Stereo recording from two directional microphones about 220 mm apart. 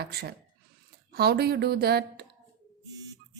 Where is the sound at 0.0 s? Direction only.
45° right (ahead or behind).